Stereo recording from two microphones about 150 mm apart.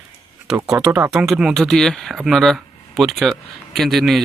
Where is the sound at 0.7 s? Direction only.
10° right (ahead or behind).